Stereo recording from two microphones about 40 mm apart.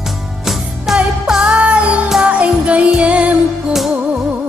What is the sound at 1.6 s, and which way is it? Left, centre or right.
Music, right.